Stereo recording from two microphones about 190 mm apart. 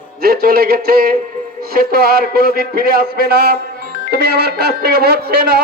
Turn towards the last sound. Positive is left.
turn(degrees=-55)  # may be behind; listen again after turning